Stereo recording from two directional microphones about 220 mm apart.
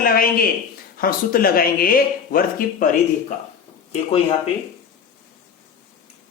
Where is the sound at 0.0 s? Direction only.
40° left (ahead or behind).